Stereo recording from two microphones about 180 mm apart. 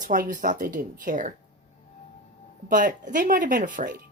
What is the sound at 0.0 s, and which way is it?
Speech, 50° right (ahead or behind).